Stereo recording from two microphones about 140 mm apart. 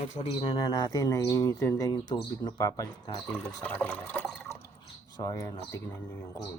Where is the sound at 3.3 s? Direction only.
15° left (ahead or behind).